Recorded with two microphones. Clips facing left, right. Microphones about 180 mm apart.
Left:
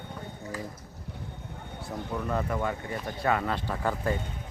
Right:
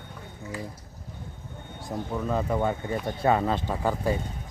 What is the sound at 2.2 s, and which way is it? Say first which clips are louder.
Speech: right 4 dB; 20° right (ahead or behind).